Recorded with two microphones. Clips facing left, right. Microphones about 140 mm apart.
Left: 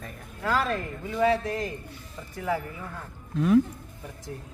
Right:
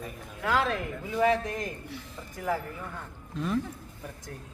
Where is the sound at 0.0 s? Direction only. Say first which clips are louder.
Left 1 dB; 10° right (ahead or behind).